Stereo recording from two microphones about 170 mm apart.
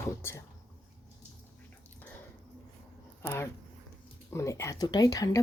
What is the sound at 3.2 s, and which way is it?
Speech, 15° left (ahead or behind).